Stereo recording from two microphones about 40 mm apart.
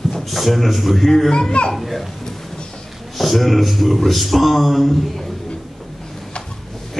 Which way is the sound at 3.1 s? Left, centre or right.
Centre.